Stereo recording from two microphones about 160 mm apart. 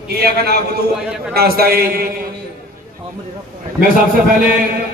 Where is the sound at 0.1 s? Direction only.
75° right (ahead or behind).